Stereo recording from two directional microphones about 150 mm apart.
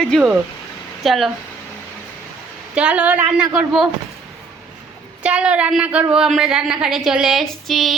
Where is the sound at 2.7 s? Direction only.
5° right (ahead or behind).